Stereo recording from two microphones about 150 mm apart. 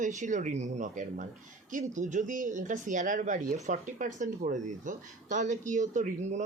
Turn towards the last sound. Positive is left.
turn(degrees=-55)  # may be behind; listen again after turning